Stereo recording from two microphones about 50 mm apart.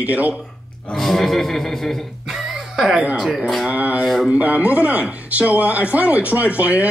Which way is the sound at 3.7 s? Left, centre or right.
Right.